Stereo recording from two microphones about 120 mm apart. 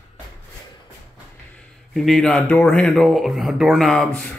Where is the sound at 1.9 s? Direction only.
Centre (ahead or behind).